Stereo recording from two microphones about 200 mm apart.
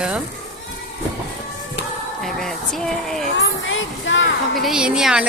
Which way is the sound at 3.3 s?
70° left (ahead or behind).